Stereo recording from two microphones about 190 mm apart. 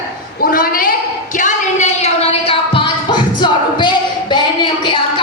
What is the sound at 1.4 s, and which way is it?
Music, 40° left (ahead or behind).